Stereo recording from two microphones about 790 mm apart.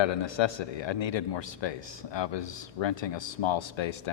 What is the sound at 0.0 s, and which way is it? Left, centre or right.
Speech, left.